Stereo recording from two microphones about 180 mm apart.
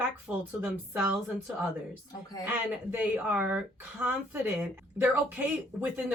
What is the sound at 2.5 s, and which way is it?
Speech, 10° right (ahead or behind).